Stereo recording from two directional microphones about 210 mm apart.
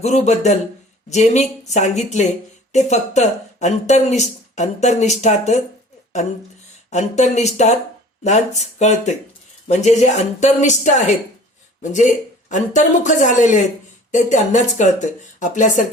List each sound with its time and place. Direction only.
0.0 s speech: 35° left (ahead or behind)
6.9 s speech: 35° left (ahead or behind)